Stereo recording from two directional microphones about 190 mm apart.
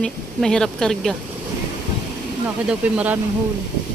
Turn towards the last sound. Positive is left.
turn(degrees=-5)  # may be behind; listen again after turning